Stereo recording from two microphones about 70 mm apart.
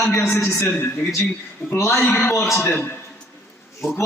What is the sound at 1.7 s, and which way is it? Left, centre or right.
Speech, left.